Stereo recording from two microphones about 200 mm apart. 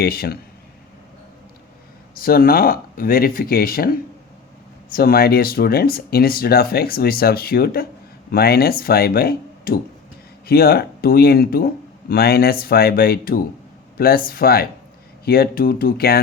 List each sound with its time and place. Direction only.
0.0 s speech: 50° left (ahead or behind)
2.1 s speech: 45° left (ahead or behind)
4.9 s speech: 45° left (ahead or behind)